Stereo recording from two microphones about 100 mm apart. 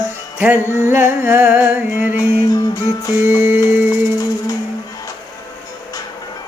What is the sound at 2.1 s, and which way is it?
Music, 40° left (ahead or behind).